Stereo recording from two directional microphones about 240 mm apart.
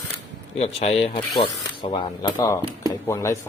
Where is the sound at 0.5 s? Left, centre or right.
Left.